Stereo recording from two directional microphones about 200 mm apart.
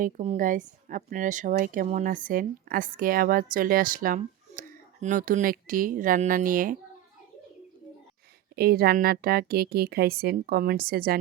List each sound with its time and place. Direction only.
0.0 s a woman's voice: 40° right (ahead or behind)
8.5 s a woman's voice: 50° right (ahead or behind)